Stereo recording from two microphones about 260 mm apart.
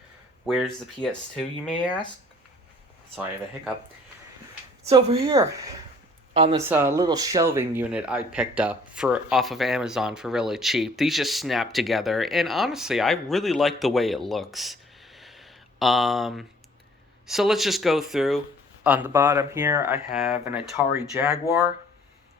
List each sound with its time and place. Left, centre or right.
0.4 s speech: centre
4.9 s speech: centre
6.7 s speech: centre